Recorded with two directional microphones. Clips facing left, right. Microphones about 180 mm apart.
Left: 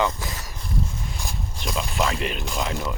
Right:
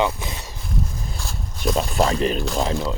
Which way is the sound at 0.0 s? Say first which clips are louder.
Right 2 dB; 20° right (ahead or behind).